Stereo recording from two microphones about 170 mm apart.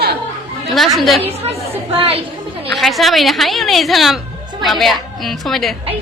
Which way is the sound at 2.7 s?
Centre (ahead or behind).